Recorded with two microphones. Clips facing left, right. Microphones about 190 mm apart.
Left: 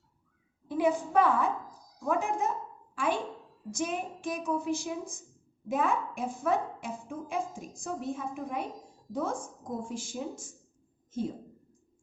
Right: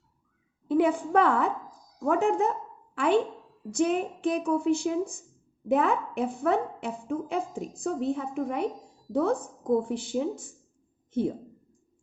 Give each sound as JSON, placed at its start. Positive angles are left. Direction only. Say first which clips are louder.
{"t": 0.7, "sound": "a woman's voice", "louder": "right 4 dB", "side_deg": -60}